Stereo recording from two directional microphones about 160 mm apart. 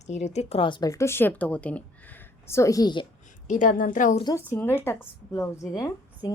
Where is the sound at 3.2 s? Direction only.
55° left (ahead or behind).